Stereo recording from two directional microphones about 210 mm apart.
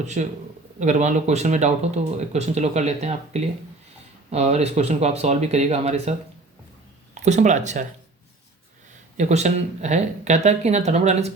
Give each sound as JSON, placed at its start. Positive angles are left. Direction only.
{"t": 0.0, "sound": "speech", "side_deg": -35}
{"t": 9.1, "sound": "speech", "side_deg": -35}